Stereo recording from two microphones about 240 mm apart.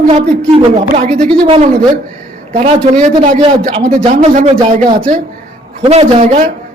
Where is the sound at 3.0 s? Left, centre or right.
Right.